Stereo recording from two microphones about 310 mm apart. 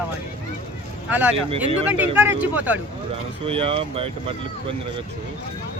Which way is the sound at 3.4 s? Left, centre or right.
Centre.